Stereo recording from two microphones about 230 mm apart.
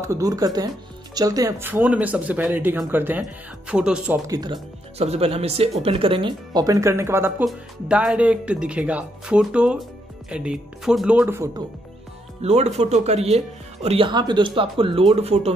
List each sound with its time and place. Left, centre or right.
0.0 s speech: centre
4.3 s speech: centre
12.4 s speech: right